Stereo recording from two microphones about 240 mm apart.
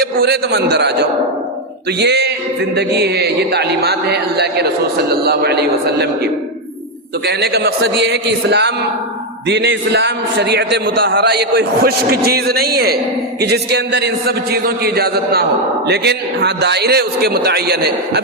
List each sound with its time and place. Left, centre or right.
0.0 s a man's voice: right
2.0 s a man's voice: right
7.3 s a man's voice: right